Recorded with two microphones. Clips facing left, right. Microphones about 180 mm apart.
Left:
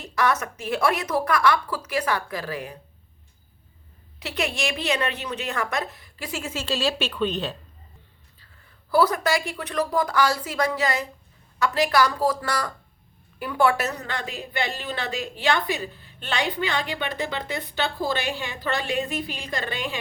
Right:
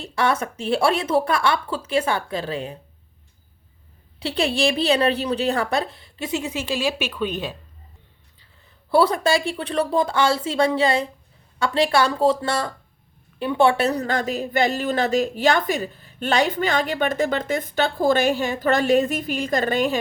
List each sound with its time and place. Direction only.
0.0 s a woman's voice: 30° right (ahead or behind)
4.2 s a woman's voice: 30° right (ahead or behind); by 7.5 s 10° right (ahead or behind)
8.9 s a woman's voice: 30° right (ahead or behind); by 20.0 s 45° right (ahead or behind)